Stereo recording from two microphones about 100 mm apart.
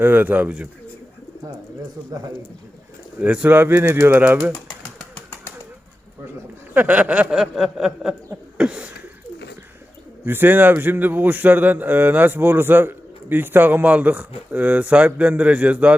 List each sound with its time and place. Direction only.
0.0 s a man's voice: 20° right (ahead or behind)
3.2 s a man's voice: 15° right (ahead or behind)
6.7 s a man's voice: 15° right (ahead or behind)
8.5 s a sound: 10° right (ahead or behind)
10.2 s a man's voice: 20° right (ahead or behind)